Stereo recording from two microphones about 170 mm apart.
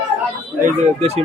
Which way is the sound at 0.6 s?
40° right (ahead or behind).